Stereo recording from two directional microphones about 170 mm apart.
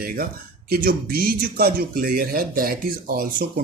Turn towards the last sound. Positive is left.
turn(degrees=-60)  # may be behind; listen again after turning